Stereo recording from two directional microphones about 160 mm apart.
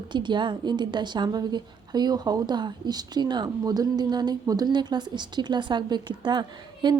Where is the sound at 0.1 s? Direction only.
30° right (ahead or behind).